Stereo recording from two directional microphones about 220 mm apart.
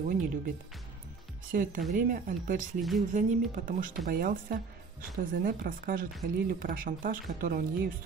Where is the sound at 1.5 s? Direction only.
40° right (ahead or behind).